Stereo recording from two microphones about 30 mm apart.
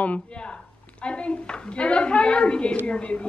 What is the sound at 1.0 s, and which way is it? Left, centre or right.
A woman's voice, left.